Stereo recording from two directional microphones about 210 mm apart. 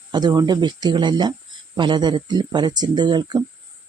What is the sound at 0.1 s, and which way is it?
Speech, 20° right (ahead or behind).